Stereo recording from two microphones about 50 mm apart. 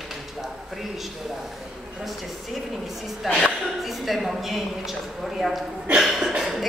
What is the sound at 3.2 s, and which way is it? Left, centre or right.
A man's voice, centre.